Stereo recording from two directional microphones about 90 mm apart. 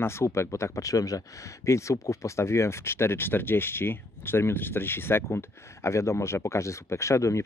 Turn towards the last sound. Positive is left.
turn(degrees=35)  # may be behind; listen again after turning